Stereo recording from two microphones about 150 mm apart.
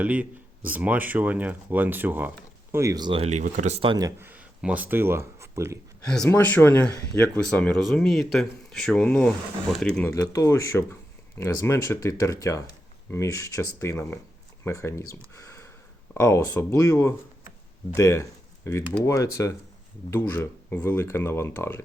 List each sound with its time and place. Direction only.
0.0 s speech: 10° right (ahead or behind); by 3.2 s 25° right (ahead or behind)
3.2 s speech: 50° right (ahead or behind)
3.9 s speech: 25° right (ahead or behind)
4.3 s speech: 10° right (ahead or behind)
6.2 s speech: 15° left (ahead or behind)
10.1 s speech: 20° left (ahead or behind)
13.9 s speech: 5° left (ahead or behind)
14.6 s speech: 20° left (ahead or behind)